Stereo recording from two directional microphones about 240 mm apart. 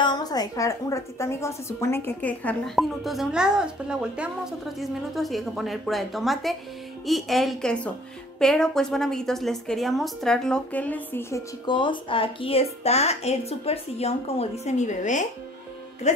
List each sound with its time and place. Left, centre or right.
0.0 s a woman's voice: centre